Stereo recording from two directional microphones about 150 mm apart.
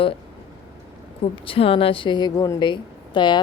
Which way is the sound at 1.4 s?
40° left (ahead or behind).